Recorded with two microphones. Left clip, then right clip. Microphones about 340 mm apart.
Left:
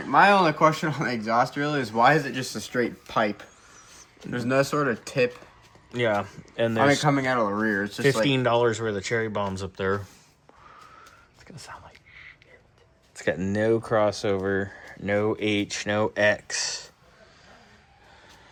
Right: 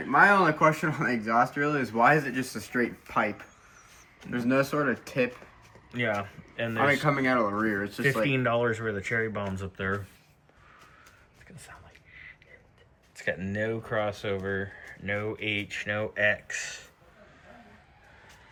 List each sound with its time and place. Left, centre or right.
0.0 s speech: left
4.3 s speech: left
5.9 s speech: centre
6.6 s speech: left
8.3 s speech: centre
11.5 s whispering: left
13.2 s speech: left
13.5 s speech: centre